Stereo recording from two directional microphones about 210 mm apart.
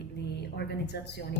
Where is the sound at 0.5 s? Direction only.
55° left (ahead or behind).